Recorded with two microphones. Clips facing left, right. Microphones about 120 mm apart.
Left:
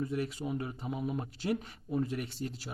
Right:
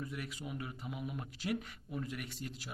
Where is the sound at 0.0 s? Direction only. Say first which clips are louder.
Left 9 dB; 30° left (ahead or behind).